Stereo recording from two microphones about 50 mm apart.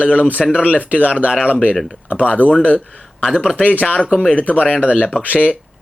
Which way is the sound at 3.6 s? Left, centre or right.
Left.